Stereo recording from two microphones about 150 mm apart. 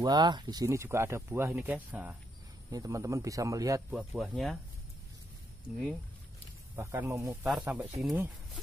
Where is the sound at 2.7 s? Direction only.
20° right (ahead or behind).